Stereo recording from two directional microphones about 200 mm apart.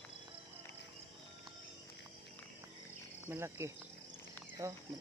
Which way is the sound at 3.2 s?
10° right (ahead or behind).